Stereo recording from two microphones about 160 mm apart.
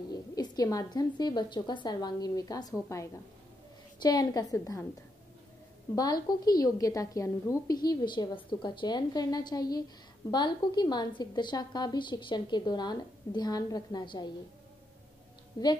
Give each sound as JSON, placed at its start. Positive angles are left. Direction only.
{"t": 0.1, "sound": "a woman's voice", "side_deg": 25}
{"t": 5.9, "sound": "a woman's voice", "side_deg": 25}
{"t": 15.6, "sound": "a woman's voice", "side_deg": 30}